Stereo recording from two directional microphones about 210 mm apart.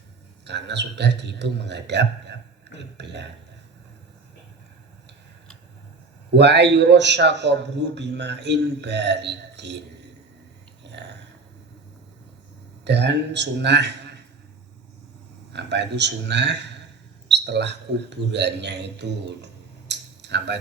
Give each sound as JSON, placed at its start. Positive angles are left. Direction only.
{"t": 0.4, "sound": "a man's voice", "side_deg": -55}
{"t": 6.3, "sound": "a man's voice", "side_deg": -55}
{"t": 10.8, "sound": "a sound", "side_deg": -55}
{"t": 12.8, "sound": "a man's voice", "side_deg": -55}
{"t": 15.5, "sound": "a man's voice", "side_deg": -55}
{"t": 19.9, "sound": "a sound", "side_deg": -55}